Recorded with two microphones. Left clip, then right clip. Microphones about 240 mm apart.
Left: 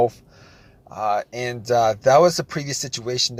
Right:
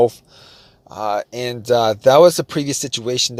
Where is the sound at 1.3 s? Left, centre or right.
Right.